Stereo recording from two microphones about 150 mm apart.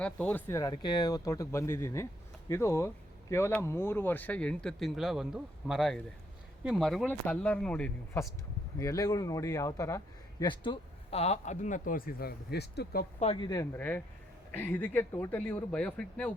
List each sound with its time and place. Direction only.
0.0 s speech: 10° left (ahead or behind)
8.8 s speech: 25° left (ahead or behind)
10.4 s speech: 30° left (ahead or behind); by 13.1 s 90° left
13.3 s speech: 25° left (ahead or behind)
13.7 s speech: 10° left (ahead or behind)